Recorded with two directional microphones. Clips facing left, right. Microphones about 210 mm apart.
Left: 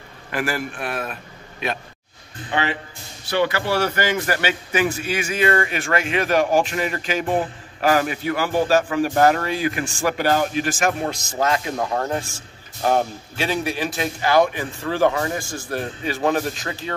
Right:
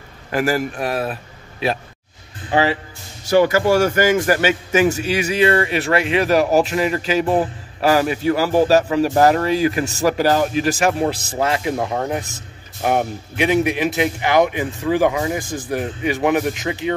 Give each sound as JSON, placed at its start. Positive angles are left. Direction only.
{"t": 0.3, "sound": "a man's voice", "side_deg": -40}
{"t": 3.3, "sound": "a man's voice", "side_deg": -45}